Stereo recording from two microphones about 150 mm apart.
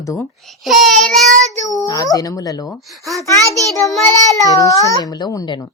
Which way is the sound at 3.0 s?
20° right (ahead or behind).